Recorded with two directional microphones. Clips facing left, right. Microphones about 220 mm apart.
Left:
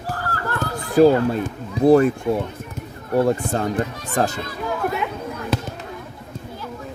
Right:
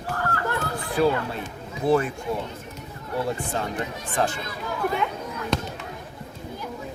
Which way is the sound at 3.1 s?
45° left (ahead or behind).